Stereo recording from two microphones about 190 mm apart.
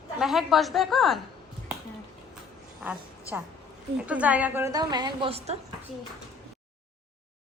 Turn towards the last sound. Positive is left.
turn(degrees=-30)  # may be behind; listen again after turning